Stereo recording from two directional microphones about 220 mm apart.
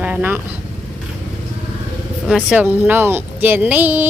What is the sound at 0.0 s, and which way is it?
Vehicle, 10° right (ahead or behind).